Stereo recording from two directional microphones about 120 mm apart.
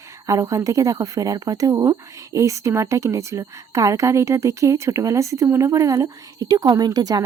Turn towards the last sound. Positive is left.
turn(degrees=-35)  # may be behind; listen again after turning